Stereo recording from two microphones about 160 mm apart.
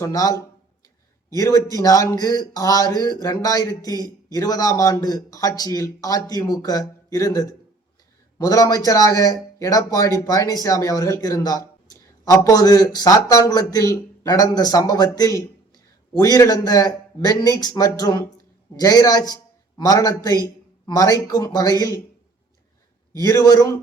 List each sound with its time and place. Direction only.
0.0 s a man's voice: 20° left (ahead or behind)
23.1 s speech: 20° left (ahead or behind)